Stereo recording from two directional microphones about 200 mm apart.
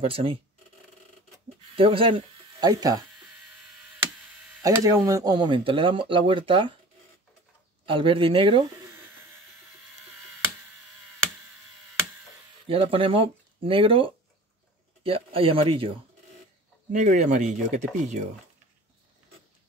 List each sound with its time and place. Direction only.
0.0 s speech: 25° right (ahead or behind)
1.8 s speech: 25° right (ahead or behind)
4.6 s speech: 15° right (ahead or behind)
7.8 s speech: 25° right (ahead or behind)
12.6 s speech: 25° right (ahead or behind)
17.0 s speech: 40° right (ahead or behind)